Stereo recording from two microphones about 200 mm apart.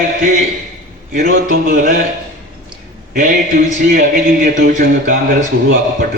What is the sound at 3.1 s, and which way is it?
A man's voice, 45° right (ahead or behind).